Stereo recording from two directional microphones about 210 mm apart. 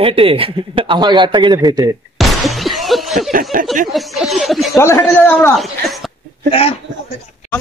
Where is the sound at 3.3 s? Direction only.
40° right (ahead or behind).